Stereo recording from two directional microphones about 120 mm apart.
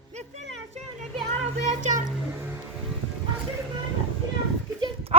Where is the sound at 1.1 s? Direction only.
65° right (ahead or behind).